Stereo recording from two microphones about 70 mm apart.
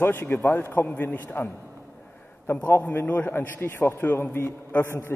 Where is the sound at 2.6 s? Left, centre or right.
Left.